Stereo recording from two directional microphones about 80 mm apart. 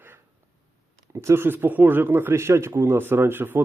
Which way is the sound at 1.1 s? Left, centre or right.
Right.